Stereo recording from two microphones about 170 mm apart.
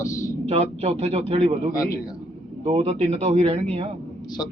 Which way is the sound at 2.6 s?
35° right (ahead or behind).